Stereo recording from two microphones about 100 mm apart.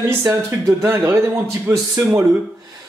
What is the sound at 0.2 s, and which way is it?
Speech, 20° right (ahead or behind).